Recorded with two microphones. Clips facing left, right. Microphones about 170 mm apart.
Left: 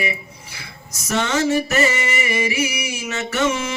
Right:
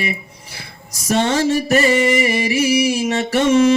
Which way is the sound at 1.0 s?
35° right (ahead or behind).